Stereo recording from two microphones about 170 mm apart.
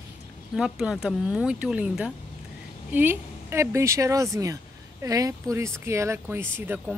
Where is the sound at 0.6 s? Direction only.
5° right (ahead or behind).